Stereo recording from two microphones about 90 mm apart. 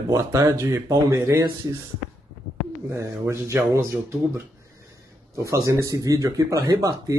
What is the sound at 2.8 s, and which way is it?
A man's voice, 30° right (ahead or behind).